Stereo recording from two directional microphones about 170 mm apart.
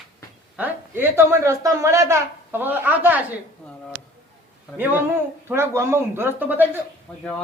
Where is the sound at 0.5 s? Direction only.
10° right (ahead or behind).